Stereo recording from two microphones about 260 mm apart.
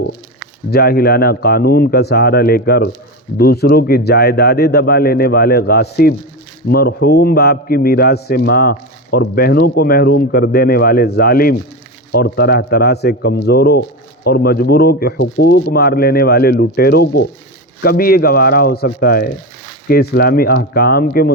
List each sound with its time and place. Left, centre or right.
0.7 s a man's voice: left